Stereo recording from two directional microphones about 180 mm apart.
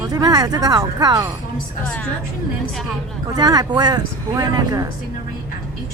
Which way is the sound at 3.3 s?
20° right (ahead or behind).